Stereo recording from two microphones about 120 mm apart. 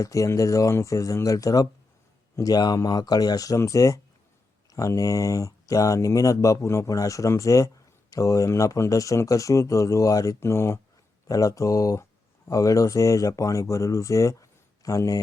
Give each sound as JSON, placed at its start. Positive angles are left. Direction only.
{"t": 0.0, "sound": "speech", "side_deg": 25}